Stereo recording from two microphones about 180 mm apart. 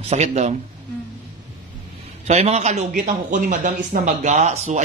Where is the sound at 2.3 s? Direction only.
40° right (ahead or behind).